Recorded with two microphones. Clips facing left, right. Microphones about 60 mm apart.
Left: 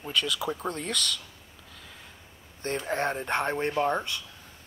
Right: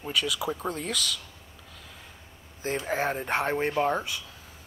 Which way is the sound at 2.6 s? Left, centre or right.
Centre.